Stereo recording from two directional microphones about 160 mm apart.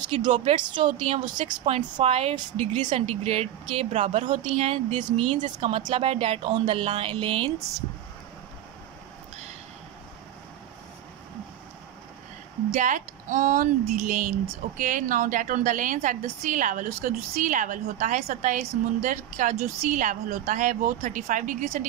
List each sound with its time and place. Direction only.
0.1 s a woman's voice: 40° right (ahead or behind)
0.6 s a woman's voice: 30° right (ahead or behind)
12.7 s a woman's voice: 55° right (ahead or behind)